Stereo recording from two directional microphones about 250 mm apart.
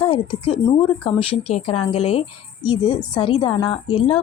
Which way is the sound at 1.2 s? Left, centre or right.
Left.